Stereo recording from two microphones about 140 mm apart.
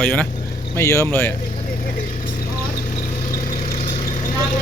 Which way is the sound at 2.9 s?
65° left (ahead or behind).